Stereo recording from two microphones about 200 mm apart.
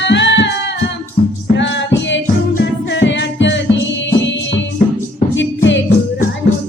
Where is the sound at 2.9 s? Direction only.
65° left (ahead or behind).